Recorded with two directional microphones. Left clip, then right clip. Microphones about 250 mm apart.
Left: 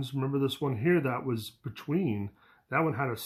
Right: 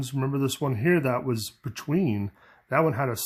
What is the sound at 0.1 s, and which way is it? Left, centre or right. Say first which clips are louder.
Speech: right 2 dB; right.